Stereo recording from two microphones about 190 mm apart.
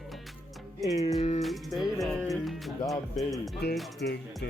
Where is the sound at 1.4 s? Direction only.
Centre (ahead or behind).